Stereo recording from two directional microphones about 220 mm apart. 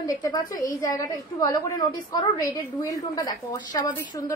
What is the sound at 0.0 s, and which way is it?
A woman's voice, 15° left (ahead or behind).